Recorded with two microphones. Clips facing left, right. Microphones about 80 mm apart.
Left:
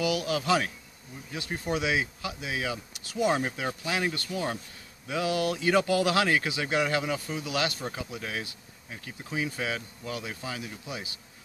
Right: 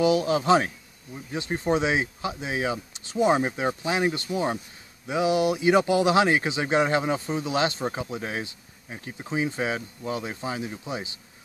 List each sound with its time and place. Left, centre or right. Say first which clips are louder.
0.0 s speech: right 7 dB; right